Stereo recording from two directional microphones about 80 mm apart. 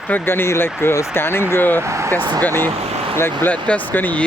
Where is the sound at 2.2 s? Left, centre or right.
Right.